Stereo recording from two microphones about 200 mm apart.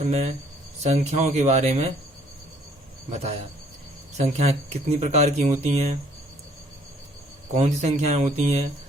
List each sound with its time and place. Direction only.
0.0 s speech: 35° right (ahead or behind)
4.2 s speech: 30° right (ahead or behind)
7.5 s speech: 35° right (ahead or behind)